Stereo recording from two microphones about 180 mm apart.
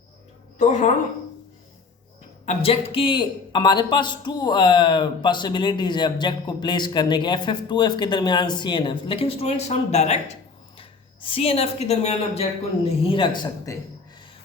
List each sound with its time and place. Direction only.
0.6 s speech: 40° left (ahead or behind)
2.5 s a man's voice: 35° left (ahead or behind)